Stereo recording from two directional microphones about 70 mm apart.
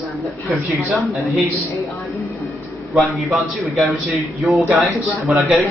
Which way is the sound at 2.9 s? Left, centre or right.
Centre.